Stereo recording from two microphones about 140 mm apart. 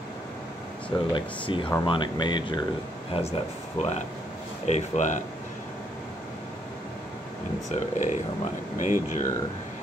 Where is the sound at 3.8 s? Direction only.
55° left (ahead or behind).